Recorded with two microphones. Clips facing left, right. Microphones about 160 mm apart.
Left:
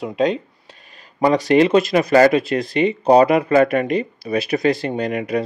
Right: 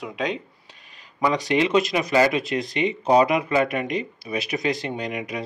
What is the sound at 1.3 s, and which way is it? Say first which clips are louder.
Speech: left 7 dB; 45° left (ahead or behind).